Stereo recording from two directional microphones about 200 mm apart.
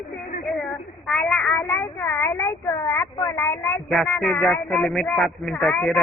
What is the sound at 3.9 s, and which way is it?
Speech, centre (ahead or behind).